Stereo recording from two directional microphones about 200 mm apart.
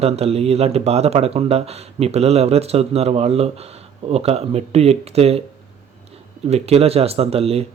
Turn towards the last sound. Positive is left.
turn(degrees=-30)  # may be behind; listen again after turning